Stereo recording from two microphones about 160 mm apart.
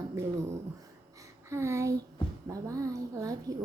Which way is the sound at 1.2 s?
15° right (ahead or behind).